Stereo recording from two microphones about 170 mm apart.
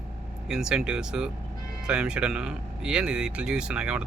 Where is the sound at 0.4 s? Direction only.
5° right (ahead or behind).